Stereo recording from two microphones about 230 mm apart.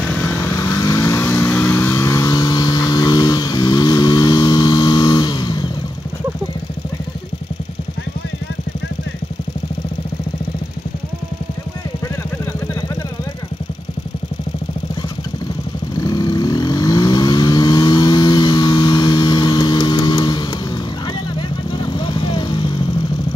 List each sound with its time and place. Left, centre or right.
0.1 s vehicle: centre
16.0 s vehicle: centre